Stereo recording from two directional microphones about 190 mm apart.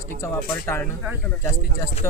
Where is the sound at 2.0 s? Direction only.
15° left (ahead or behind).